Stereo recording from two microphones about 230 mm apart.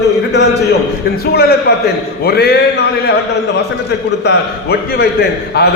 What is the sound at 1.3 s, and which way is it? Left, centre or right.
A man's voice, left.